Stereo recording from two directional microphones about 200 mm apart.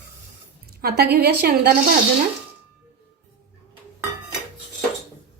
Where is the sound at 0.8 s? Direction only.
50° right (ahead or behind).